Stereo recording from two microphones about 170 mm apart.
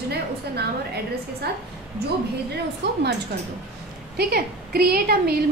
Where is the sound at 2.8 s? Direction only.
90° right.